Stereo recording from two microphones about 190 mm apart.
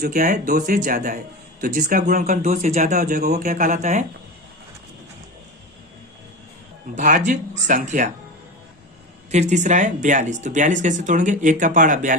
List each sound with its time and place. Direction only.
0.0 s speech: 50° right (ahead or behind)
6.9 s speech: 40° right (ahead or behind)
9.3 s speech: 40° right (ahead or behind)